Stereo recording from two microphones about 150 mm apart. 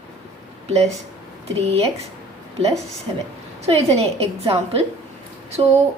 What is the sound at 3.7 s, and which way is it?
A woman's voice, 45° right (ahead or behind).